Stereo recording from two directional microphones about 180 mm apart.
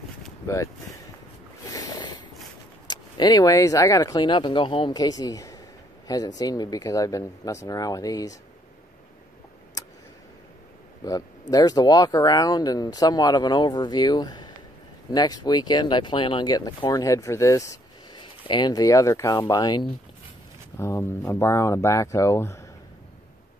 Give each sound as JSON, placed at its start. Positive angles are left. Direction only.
{"t": 1.7, "sound": "a sound", "side_deg": 20}
{"t": 2.9, "sound": "speech", "side_deg": 25}
{"t": 9.8, "sound": "tick", "side_deg": 20}
{"t": 11.0, "sound": "speech", "side_deg": 20}